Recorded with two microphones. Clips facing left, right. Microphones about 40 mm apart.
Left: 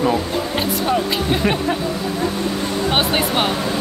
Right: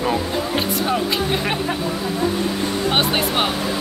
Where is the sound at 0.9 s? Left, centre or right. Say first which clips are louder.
Left 3 dB; centre.